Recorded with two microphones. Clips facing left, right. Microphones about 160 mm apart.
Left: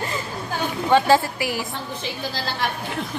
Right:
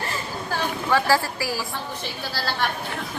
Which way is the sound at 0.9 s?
20° left (ahead or behind).